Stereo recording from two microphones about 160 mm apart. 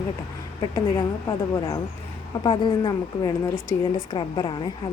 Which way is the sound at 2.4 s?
30° left (ahead or behind).